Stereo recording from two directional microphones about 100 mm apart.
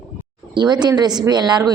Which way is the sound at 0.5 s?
45° right (ahead or behind).